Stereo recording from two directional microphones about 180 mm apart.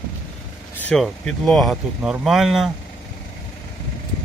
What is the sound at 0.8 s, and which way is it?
Speech, 5° left (ahead or behind).